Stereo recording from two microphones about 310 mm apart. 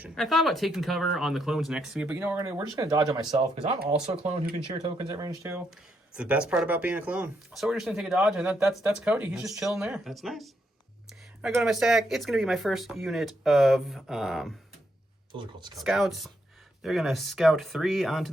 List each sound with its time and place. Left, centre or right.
0.0 s speech: centre
15.3 s speech: centre
15.8 s speech: centre